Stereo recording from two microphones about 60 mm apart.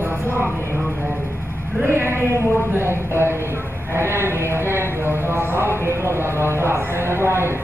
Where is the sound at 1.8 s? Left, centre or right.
Right.